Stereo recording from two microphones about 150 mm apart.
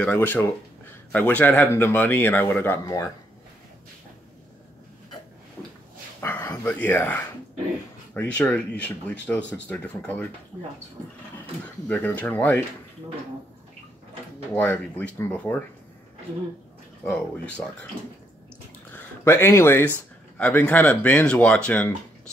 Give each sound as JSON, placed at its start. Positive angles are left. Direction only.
{"t": 0.0, "sound": "speech", "side_deg": 10}
{"t": 6.2, "sound": "speech", "side_deg": 15}
{"t": 11.9, "sound": "speech", "side_deg": 10}
{"t": 14.5, "sound": "speech", "side_deg": 10}
{"t": 17.0, "sound": "speech", "side_deg": 5}
{"t": 18.9, "sound": "speech", "side_deg": 15}